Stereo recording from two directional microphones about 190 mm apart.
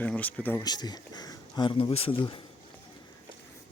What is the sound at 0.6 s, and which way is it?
Speech, 20° left (ahead or behind).